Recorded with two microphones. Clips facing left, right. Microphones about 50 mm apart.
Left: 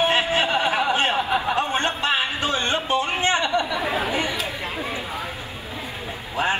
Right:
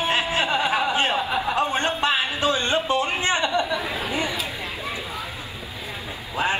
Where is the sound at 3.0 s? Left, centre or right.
Left.